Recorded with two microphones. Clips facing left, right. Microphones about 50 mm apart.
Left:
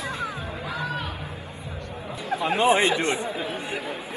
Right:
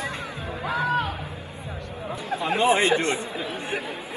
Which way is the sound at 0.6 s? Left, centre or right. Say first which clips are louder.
Right 7 dB; right.